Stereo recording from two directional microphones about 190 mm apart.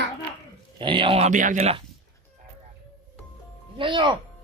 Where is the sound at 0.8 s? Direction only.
25° right (ahead or behind).